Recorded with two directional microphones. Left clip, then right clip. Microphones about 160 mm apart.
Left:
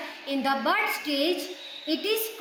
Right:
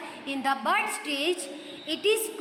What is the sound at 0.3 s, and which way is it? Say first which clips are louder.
A woman's voice: left 1 dB; 30° right (ahead or behind).